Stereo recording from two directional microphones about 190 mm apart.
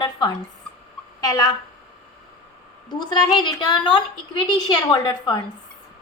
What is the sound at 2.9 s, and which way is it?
A woman's voice, 20° left (ahead or behind).